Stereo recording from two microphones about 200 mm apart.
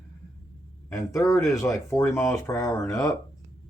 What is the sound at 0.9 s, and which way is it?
Speech, 15° left (ahead or behind).